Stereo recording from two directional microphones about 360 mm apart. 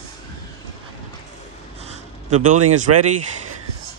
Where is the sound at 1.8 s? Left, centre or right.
Centre.